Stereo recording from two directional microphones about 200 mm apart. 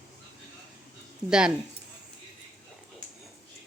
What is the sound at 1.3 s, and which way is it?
Speech, 5° right (ahead or behind).